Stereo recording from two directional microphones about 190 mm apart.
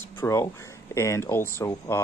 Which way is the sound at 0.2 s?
15° left (ahead or behind).